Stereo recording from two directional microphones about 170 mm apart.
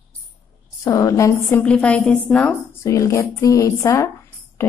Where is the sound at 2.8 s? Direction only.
15° left (ahead or behind).